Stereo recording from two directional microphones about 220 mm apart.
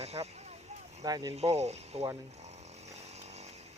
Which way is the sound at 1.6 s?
30° right (ahead or behind).